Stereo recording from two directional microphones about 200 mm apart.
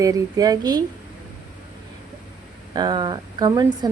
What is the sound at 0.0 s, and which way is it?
Speech, 20° right (ahead or behind).